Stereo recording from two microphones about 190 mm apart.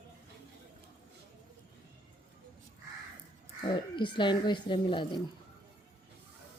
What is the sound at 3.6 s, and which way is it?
A woman's voice, 25° left (ahead or behind).